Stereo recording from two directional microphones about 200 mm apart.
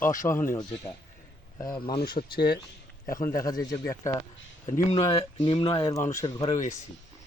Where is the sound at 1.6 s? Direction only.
20° left (ahead or behind).